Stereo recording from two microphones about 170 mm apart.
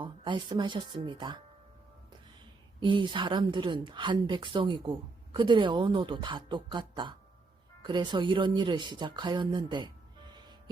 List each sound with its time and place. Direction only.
0.0 s speech: 30° right (ahead or behind)
2.8 s speech: 30° right (ahead or behind)